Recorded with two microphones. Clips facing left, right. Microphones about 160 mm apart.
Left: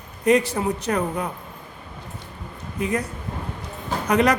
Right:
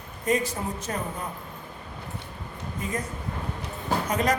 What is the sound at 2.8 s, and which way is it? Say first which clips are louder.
Speech: left 7 dB; 70° left (ahead or behind).